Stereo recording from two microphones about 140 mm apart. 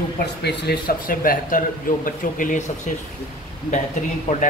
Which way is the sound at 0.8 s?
90° left.